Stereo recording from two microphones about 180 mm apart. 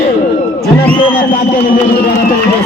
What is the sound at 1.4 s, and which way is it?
Speech, 60° left (ahead or behind).